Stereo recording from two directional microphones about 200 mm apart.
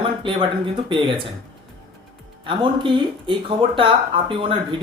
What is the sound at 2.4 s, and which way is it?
Speech, 25° right (ahead or behind).